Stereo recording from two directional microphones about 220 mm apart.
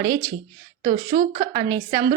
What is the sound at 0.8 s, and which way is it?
Speech, 40° right (ahead or behind).